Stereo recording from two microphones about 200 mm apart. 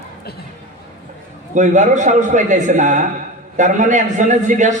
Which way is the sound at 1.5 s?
40° right (ahead or behind).